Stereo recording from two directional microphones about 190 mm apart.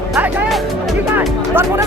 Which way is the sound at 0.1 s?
Centre (ahead or behind).